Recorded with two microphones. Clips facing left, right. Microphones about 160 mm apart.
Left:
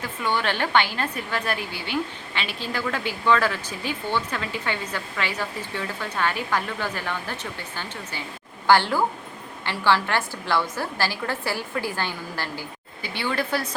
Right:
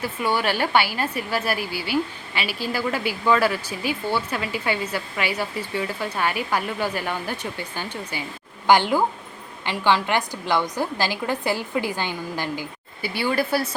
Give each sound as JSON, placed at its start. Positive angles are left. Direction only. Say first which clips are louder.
{"t": 0.0, "sound": "a woman's voice", "louder": "right 2 dB", "side_deg": -10}
{"t": 8.6, "sound": "a woman's voice", "louder": "right 1 dB", "side_deg": -15}